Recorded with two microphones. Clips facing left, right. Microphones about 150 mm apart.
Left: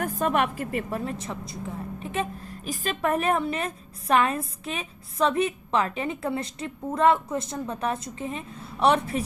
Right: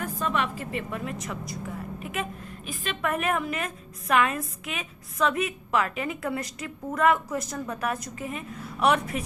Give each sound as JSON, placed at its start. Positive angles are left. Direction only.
{"t": 0.0, "sound": "a woman's voice", "side_deg": 50}